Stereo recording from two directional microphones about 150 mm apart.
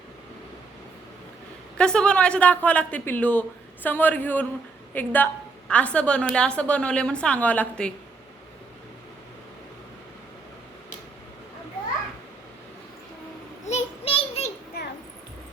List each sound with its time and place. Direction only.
1.8 s a woman's voice: 5° left (ahead or behind)
13.7 s child singing: 45° left (ahead or behind)
14.8 s a sound: 90° left